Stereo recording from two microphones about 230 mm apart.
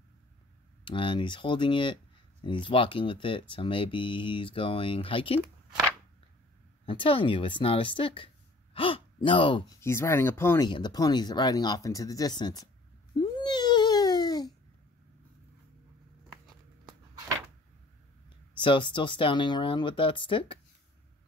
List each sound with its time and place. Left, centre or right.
0.8 s speech: left
6.9 s speech: left
9.8 s speech: centre
13.2 s a sound: centre
18.6 s speech: left